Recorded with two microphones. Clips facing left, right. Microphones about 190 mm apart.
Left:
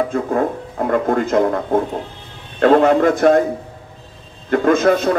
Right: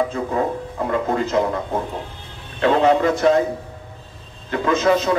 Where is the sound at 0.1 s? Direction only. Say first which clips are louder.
Left 3 dB; 55° left (ahead or behind).